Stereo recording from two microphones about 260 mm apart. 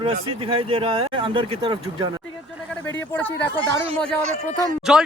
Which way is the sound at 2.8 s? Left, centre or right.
Centre.